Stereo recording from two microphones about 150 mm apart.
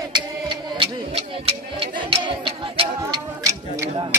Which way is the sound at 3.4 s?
20° right (ahead or behind).